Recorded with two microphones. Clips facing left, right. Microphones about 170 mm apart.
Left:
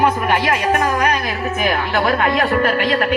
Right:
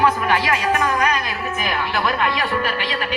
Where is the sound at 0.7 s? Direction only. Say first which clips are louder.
Left 2 dB; 40° left (ahead or behind).